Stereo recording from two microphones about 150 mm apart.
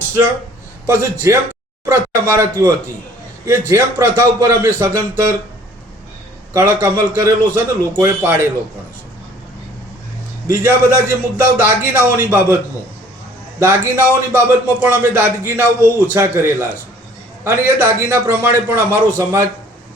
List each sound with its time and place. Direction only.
0.9 s a man's voice: 15° right (ahead or behind)
6.5 s a man's voice: 15° right (ahead or behind)
10.4 s a man's voice: 15° right (ahead or behind)
13.6 s a man's voice: 15° right (ahead or behind)